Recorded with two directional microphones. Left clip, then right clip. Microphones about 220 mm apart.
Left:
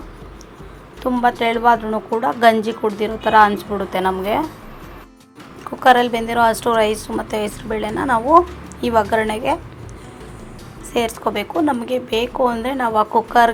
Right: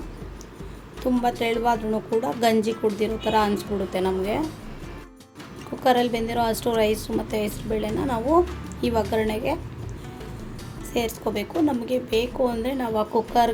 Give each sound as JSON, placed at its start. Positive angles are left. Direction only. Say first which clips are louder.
{"t": 1.1, "sound": "a woman's voice", "louder": "left 7 dB", "side_deg": 0}
{"t": 5.8, "sound": "a woman's voice", "louder": "left 8 dB", "side_deg": 0}
{"t": 10.9, "sound": "a woman's voice", "louder": "left 6 dB", "side_deg": 5}